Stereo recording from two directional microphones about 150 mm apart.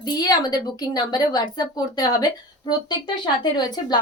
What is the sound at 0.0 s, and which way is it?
A woman's voice, 25° left (ahead or behind).